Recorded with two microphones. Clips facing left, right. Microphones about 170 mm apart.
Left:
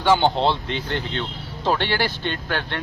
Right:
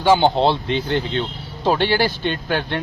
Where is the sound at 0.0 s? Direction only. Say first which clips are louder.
Right 3 dB; 15° right (ahead or behind).